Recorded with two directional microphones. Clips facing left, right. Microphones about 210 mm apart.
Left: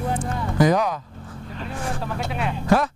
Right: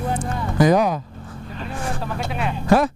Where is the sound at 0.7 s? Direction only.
10° right (ahead or behind).